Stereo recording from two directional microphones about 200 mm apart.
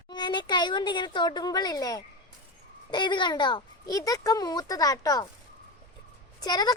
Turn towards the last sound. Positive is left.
turn(degrees=20)  # may be behind; listen again after turning